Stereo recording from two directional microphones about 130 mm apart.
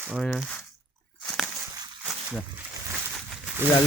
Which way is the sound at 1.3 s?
Centre (ahead or behind).